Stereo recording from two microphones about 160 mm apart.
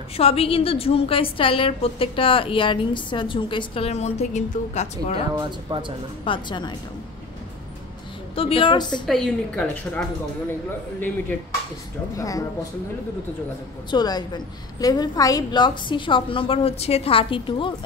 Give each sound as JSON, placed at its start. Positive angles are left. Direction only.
{"t": 0.2, "sound": "a woman's voice", "side_deg": 35}
{"t": 5.4, "sound": "speech", "side_deg": -30}
{"t": 6.2, "sound": "a woman's voice", "side_deg": 30}
{"t": 8.4, "sound": "a woman's voice", "side_deg": 35}
{"t": 9.0, "sound": "a woman's voice", "side_deg": 0}
{"t": 12.2, "sound": "speech", "side_deg": 20}
{"t": 13.8, "sound": "a woman's voice", "side_deg": 25}